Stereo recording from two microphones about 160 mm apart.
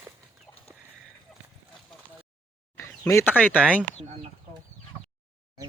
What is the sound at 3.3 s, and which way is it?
Speech, 5° right (ahead or behind).